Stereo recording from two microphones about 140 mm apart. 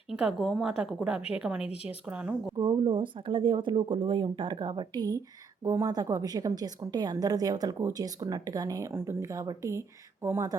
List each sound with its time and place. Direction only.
0.1 s a woman's voice: 5° right (ahead or behind)
1.6 s speech: 45° left (ahead or behind)
1.9 s speech: 10° right (ahead or behind)
2.6 s a woman's voice: 35° right (ahead or behind)